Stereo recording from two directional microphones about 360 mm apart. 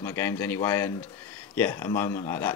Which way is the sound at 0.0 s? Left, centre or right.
Centre.